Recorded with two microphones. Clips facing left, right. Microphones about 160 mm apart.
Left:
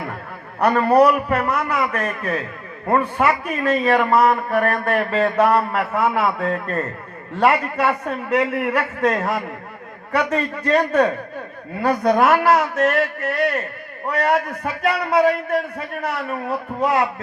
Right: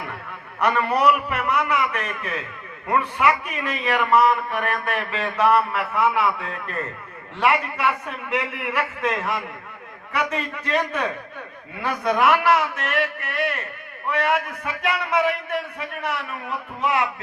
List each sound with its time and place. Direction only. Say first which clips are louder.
0.6 s a man's voice: left 5 dB; 40° left (ahead or behind)